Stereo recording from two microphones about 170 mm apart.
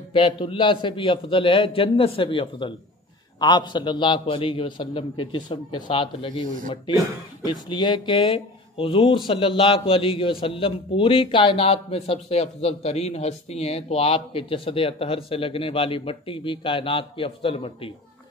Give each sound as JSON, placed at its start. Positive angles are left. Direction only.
{"t": 0.1, "sound": "a man's voice", "side_deg": 30}
{"t": 7.4, "sound": "speech", "side_deg": 25}